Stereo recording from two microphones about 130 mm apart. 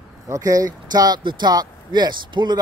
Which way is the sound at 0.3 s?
25° right (ahead or behind).